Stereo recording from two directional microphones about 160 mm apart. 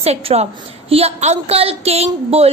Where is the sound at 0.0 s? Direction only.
40° right (ahead or behind).